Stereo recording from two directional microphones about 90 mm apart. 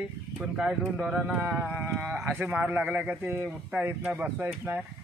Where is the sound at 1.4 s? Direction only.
20° right (ahead or behind).